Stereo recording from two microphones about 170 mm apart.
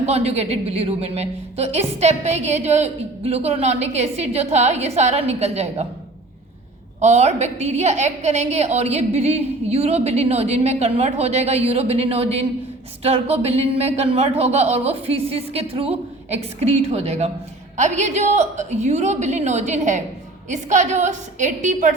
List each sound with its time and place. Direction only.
0.0 s a woman's voice: 40° right (ahead or behind)
7.0 s a woman's voice: 40° right (ahead or behind)